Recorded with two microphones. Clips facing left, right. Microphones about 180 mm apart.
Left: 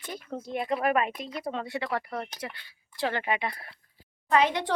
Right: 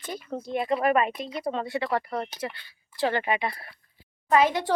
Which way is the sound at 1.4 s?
35° right (ahead or behind).